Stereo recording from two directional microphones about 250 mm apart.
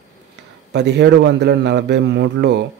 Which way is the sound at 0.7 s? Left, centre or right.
Right.